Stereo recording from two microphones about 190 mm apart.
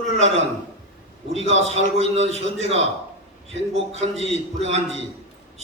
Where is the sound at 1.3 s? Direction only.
35° right (ahead or behind).